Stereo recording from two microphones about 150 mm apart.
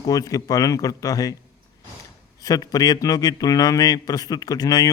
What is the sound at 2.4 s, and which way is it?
Speech, 25° left (ahead or behind).